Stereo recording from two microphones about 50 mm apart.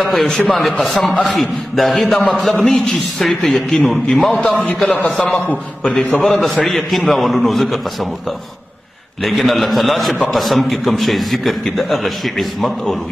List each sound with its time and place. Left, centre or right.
0.0 s a man's voice: centre
4.8 s a man's voice: left
6.2 s a man's voice: centre
9.2 s a man's voice: centre